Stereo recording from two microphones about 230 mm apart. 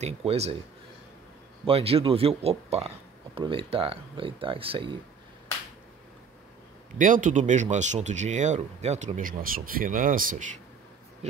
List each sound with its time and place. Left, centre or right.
0.0 s speech: right
1.7 s speech: right
7.0 s speech: right